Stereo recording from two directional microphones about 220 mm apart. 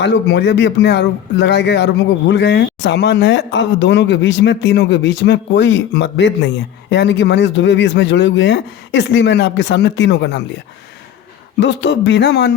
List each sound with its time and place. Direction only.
0.0 s speech: 50° left (ahead or behind)
11.6 s speech: 55° left (ahead or behind)